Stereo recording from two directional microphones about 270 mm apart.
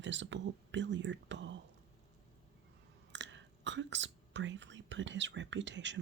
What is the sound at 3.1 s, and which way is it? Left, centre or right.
Speech, right.